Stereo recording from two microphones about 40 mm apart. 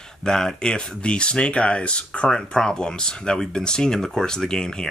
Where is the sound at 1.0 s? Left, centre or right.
Left.